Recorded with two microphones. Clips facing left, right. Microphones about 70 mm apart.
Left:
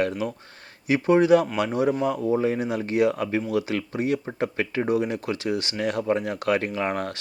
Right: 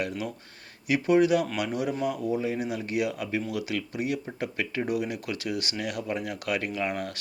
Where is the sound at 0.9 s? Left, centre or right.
Left.